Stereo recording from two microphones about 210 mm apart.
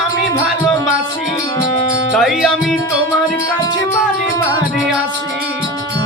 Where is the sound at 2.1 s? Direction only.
Centre (ahead or behind).